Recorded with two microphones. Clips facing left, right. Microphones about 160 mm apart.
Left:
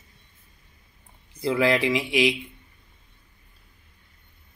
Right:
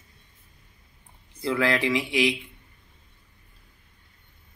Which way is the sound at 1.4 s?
15° left (ahead or behind).